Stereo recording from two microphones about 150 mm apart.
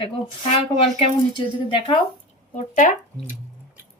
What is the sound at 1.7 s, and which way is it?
Speech, 35° left (ahead or behind).